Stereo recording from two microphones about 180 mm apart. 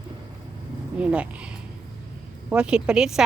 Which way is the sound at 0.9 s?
5° right (ahead or behind).